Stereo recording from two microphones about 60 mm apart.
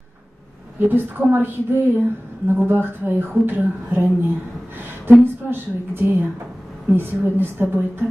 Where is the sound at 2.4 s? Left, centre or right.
Right.